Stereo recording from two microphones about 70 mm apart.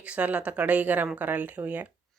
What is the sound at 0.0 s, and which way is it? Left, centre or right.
Speech, centre.